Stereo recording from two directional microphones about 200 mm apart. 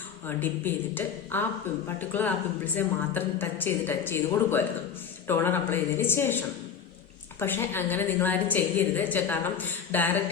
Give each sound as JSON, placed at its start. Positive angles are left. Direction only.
{"t": 0.3, "sound": "a woman's voice", "side_deg": 10}